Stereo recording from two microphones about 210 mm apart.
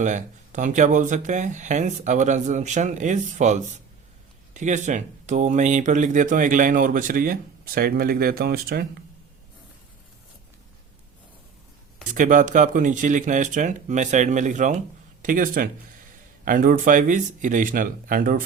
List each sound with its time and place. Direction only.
0.0 s speech: 35° right (ahead or behind)
12.1 s speech: 40° right (ahead or behind)